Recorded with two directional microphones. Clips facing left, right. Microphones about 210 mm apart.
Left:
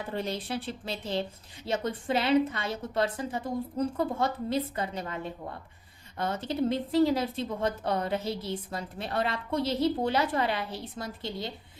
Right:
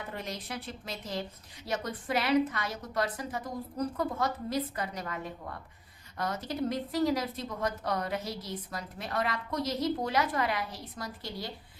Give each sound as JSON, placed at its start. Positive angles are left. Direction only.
{"t": 0.1, "sound": "speech", "side_deg": 30}